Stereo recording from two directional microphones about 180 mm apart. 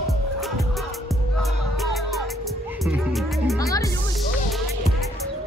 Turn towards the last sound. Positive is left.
turn(degrees=20)  # may be behind; listen again after turning